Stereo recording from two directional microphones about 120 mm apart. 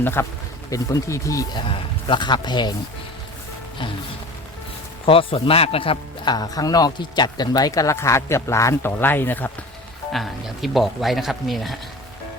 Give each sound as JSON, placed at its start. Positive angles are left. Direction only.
{"t": 0.0, "sound": "speech", "side_deg": 20}
{"t": 2.0, "sound": "speech", "side_deg": 40}
{"t": 5.0, "sound": "a man's voice", "side_deg": 50}
{"t": 6.3, "sound": "speech", "side_deg": 30}
{"t": 10.1, "sound": "speech", "side_deg": 0}